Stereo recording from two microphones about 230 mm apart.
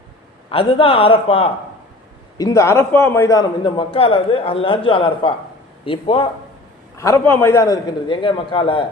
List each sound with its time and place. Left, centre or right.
0.5 s a man's voice: left
2.4 s a man's voice: centre
6.9 s a man's voice: centre